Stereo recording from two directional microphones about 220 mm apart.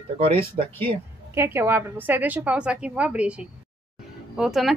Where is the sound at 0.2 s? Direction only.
25° right (ahead or behind).